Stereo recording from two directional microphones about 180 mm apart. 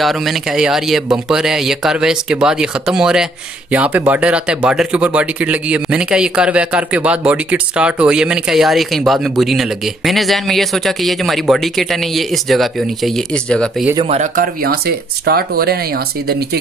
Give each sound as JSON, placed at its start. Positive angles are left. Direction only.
{"t": 0.0, "sound": "speech", "side_deg": 0}
{"t": 14.0, "sound": "speech", "side_deg": -40}